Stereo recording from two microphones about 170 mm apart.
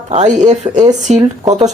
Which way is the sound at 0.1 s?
45° right (ahead or behind).